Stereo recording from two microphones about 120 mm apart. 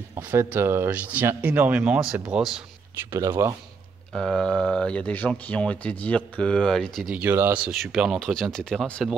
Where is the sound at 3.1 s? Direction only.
20° right (ahead or behind).